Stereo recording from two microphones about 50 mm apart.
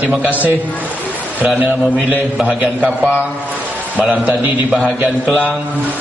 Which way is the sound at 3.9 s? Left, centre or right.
Right.